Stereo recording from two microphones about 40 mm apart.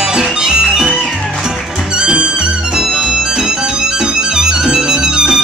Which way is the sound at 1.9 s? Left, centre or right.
Right.